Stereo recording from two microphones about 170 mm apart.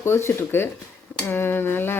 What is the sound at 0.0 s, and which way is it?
Speech, 15° left (ahead or behind).